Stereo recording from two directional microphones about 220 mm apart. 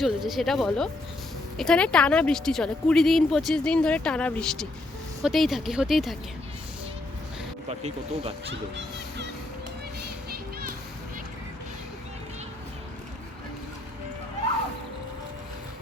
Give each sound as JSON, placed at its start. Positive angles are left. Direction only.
{"t": 0.0, "sound": "speech", "side_deg": 0}
{"t": 7.7, "sound": "speech", "side_deg": -30}